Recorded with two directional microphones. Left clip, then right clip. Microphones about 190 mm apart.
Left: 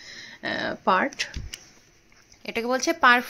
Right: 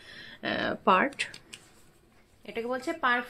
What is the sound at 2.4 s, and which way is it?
Speech, 50° left (ahead or behind).